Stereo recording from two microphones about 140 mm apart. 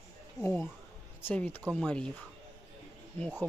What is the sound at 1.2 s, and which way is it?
Speech, 15° left (ahead or behind).